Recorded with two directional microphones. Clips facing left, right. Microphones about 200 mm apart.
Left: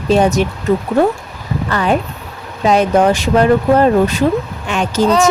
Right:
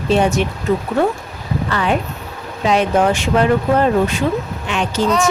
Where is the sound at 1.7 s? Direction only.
40° left (ahead or behind).